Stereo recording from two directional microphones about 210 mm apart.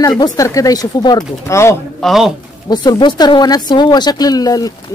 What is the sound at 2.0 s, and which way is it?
Speech, centre (ahead or behind).